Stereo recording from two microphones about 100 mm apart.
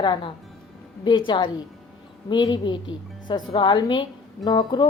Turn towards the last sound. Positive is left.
turn(degrees=45)  # may be behind; listen again after turning